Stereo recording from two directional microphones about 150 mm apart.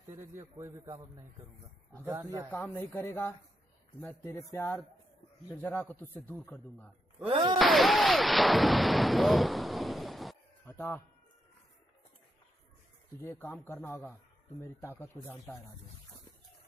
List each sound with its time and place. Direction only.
0.2 s a man's voice: 15° right (ahead or behind)
2.0 s speech: 20° right (ahead or behind)
2.5 s speech: 15° left (ahead or behind)
7.2 s speech: 35° right (ahead or behind)
7.5 s speech: centre (ahead or behind)
10.6 s speech: 15° left (ahead or behind)
13.2 s speech: 15° left (ahead or behind)